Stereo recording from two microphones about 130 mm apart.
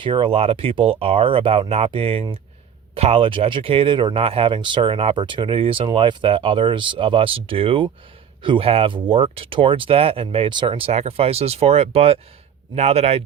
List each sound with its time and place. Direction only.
0.0 s speech: 40° right (ahead or behind)